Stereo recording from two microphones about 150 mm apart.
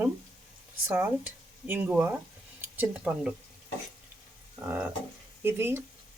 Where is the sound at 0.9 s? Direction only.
10° right (ahead or behind).